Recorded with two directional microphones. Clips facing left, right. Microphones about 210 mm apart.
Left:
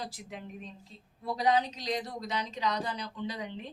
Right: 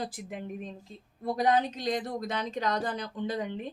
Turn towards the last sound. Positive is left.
turn(degrees=-50)  # may be behind; listen again after turning